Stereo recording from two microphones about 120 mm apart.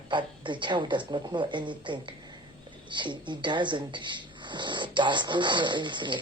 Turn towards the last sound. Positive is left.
turn(degrees=-40)  # may be behind; listen again after turning